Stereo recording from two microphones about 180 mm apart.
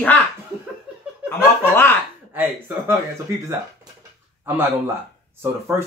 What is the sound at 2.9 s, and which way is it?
Speech, 15° right (ahead or behind).